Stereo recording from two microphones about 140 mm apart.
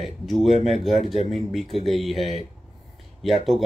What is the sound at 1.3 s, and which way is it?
Speech, centre (ahead or behind).